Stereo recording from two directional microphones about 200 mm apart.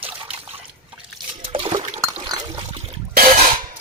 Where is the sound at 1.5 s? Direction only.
25° right (ahead or behind).